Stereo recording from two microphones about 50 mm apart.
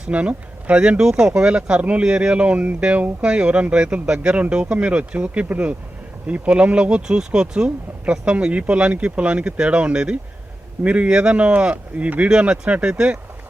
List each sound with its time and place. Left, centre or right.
0.1 s speech: right